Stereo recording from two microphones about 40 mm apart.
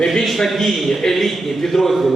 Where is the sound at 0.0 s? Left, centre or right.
Centre.